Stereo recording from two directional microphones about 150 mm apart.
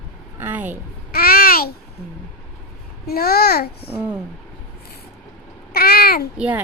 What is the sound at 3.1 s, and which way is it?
Speech, 90° left.